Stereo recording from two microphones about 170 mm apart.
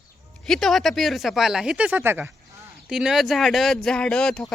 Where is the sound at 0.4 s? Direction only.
5° left (ahead or behind); by 2.3 s 15° right (ahead or behind).